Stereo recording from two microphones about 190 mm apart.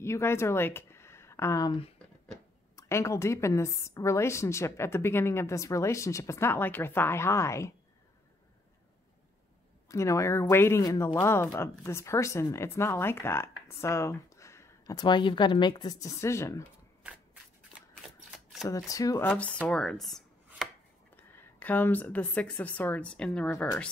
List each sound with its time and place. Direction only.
0.0 s a woman's voice: 15° left (ahead or behind)
9.8 s a woman's voice: 15° left (ahead or behind)
18.0 s shuffling cards: centre (ahead or behind)
18.7 s a woman's voice: 15° left (ahead or behind)
19.2 s a woman's voice: 5° left (ahead or behind)
19.7 s chopping: 5° left (ahead or behind)
21.2 s speech: 10° left (ahead or behind)